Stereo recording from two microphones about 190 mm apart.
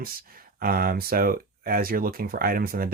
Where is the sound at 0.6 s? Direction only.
50° right (ahead or behind).